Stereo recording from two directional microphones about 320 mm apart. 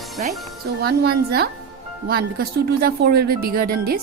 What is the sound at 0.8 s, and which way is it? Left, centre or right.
Speech, right.